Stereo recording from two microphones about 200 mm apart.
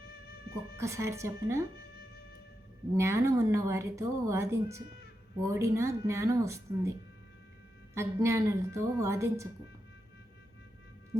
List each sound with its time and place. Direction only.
0.0 s music: 50° left (ahead or behind)
0.8 s a woman's voice: 15° right (ahead or behind)
2.9 s a woman's voice: 15° right (ahead or behind)
7.9 s a woman's voice: 15° right (ahead or behind)